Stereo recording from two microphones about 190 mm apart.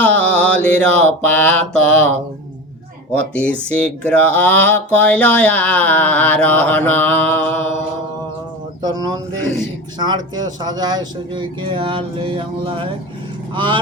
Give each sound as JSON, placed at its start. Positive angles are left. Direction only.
{"t": 0.0, "sound": "mantra", "side_deg": 10}
{"t": 3.2, "sound": "speech", "side_deg": 5}
{"t": 8.8, "sound": "speech", "side_deg": -20}